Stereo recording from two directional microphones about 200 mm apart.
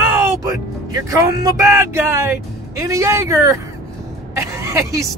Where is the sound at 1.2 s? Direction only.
15° right (ahead or behind).